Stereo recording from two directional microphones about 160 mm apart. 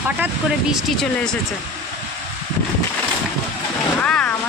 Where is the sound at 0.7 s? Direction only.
5° left (ahead or behind).